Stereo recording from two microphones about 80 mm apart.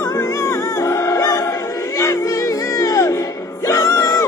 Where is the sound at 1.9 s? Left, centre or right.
Left.